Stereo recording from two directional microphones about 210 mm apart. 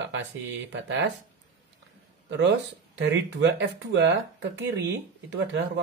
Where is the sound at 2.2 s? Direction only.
55° right (ahead or behind).